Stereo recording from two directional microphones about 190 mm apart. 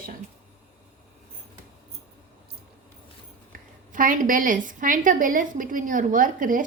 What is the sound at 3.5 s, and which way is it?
A woman's voice, 45° right (ahead or behind).